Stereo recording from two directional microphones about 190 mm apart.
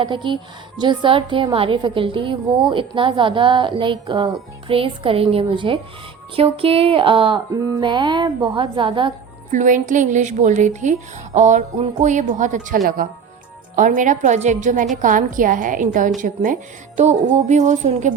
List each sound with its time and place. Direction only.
0.0 s a woman's voice: 25° right (ahead or behind)
9.5 s a woman's voice: 40° right (ahead or behind)